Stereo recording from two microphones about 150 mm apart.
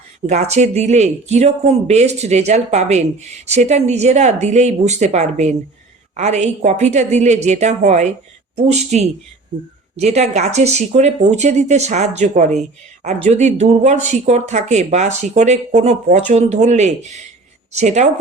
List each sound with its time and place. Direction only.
0.3 s speech: 50° right (ahead or behind)